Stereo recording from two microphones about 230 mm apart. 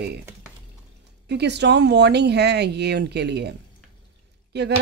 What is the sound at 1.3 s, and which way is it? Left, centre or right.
Speech, right.